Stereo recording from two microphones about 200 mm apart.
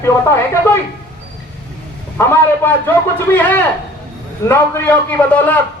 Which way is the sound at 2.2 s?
10° left (ahead or behind).